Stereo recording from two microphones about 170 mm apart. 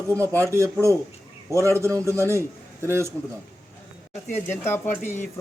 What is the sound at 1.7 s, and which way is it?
A man's voice, 15° right (ahead or behind).